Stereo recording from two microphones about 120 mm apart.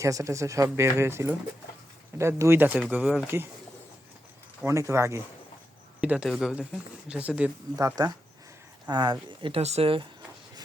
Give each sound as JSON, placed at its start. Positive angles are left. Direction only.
{"t": 0.0, "sound": "speech", "side_deg": -25}
{"t": 4.6, "sound": "speech", "side_deg": -25}
{"t": 6.0, "sound": "speech", "side_deg": -10}
{"t": 6.2, "sound": "speech", "side_deg": 5}
{"t": 7.1, "sound": "speech", "side_deg": -10}
{"t": 7.8, "sound": "speech", "side_deg": -30}
{"t": 9.4, "sound": "speech", "side_deg": -55}